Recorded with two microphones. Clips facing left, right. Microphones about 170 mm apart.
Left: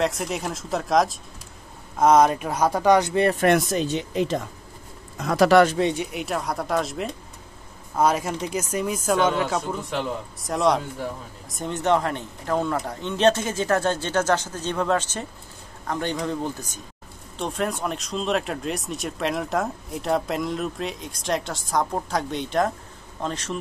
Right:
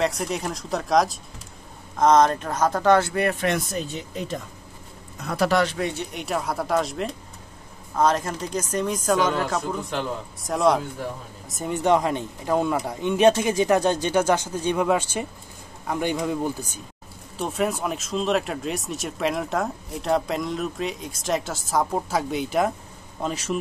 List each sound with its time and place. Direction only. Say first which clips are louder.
0.0 s speech: even; centre (ahead or behind); by 3.3 s 20° left (ahead or behind)
3.3 s speech: left 4 dB; 45° left (ahead or behind)
3.5 s speech: left 6 dB; 90° left
5.8 s speech: left 4 dB; 25° left (ahead or behind)
6.1 s speech: even; centre (ahead or behind)